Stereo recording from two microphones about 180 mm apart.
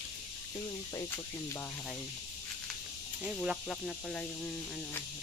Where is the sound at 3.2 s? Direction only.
Centre (ahead or behind).